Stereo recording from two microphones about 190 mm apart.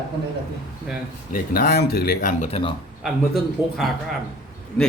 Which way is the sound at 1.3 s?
50° left (ahead or behind).